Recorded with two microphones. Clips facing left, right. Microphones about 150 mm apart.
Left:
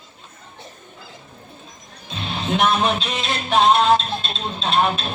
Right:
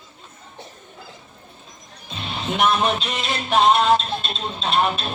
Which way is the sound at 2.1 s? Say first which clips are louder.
Left 2 dB; 5° right (ahead or behind).